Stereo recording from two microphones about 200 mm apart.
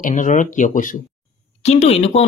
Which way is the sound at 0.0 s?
40° left (ahead or behind).